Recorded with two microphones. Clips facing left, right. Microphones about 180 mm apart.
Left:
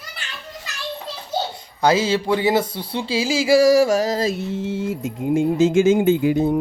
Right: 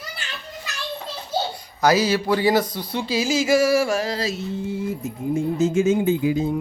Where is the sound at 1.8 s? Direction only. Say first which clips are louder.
Left 1 dB; 25° left (ahead or behind).